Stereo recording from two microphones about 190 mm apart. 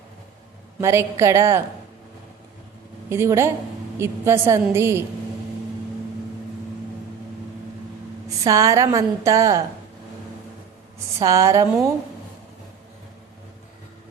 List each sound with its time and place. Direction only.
0.8 s a woman's voice: 15° right (ahead or behind)
3.1 s a woman's voice: 15° right (ahead or behind)
8.3 s a woman's voice: 15° right (ahead or behind)
11.2 s a woman's voice: 15° right (ahead or behind)